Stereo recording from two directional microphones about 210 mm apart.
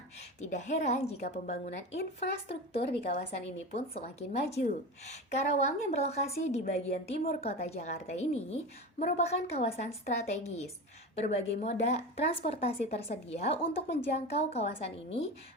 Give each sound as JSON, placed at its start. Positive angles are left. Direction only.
{"t": 0.3, "sound": "a woman's voice", "side_deg": 35}
{"t": 3.1, "sound": "a woman's voice", "side_deg": 30}